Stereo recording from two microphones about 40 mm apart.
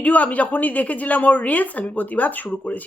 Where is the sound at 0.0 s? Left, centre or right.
Left.